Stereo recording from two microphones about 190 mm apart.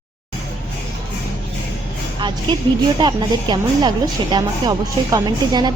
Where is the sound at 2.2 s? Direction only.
25° right (ahead or behind).